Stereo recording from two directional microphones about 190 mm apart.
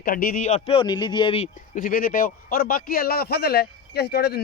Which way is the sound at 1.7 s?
45° left (ahead or behind).